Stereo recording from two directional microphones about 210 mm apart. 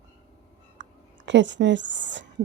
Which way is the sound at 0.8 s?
60° right (ahead or behind).